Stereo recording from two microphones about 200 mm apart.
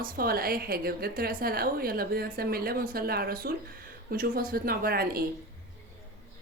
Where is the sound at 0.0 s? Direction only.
45° right (ahead or behind).